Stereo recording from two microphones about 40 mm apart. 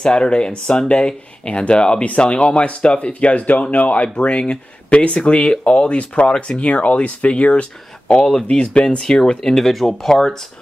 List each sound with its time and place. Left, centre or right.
0.0 s speech: left
6.2 s speech: left
6.6 s speech: left
8.1 s speech: left
9.7 s speech: centre
10.0 s speech: centre